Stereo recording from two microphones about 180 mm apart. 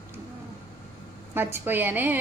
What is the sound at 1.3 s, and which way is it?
Speech, 10° right (ahead or behind).